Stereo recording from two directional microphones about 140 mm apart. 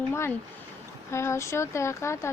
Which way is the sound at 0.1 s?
20° left (ahead or behind).